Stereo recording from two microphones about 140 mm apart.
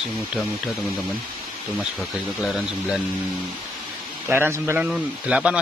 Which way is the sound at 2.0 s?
Centre (ahead or behind).